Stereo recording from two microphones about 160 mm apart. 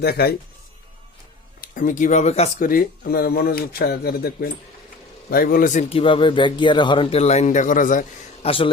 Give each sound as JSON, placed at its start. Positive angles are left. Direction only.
{"t": 0.0, "sound": "speech", "side_deg": 80}
{"t": 1.6, "sound": "speech", "side_deg": 55}
{"t": 2.6, "sound": "a man's voice", "side_deg": 60}
{"t": 5.9, "sound": "speech", "side_deg": 35}
{"t": 8.4, "sound": "speech", "side_deg": 35}